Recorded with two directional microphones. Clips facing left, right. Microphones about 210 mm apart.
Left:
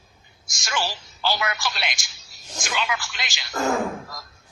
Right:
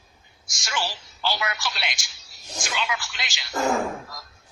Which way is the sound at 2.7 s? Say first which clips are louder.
Left 2 dB; 50° left (ahead or behind).